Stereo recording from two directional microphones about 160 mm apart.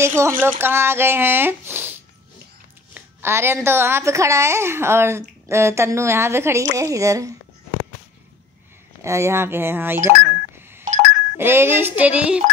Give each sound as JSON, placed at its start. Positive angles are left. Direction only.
{"t": 0.0, "sound": "a woman's voice", "side_deg": -15}
{"t": 9.0, "sound": "a woman's voice", "side_deg": -15}
{"t": 10.0, "sound": "telephone dialing", "side_deg": -15}
{"t": 11.3, "sound": "a woman's voice", "side_deg": -15}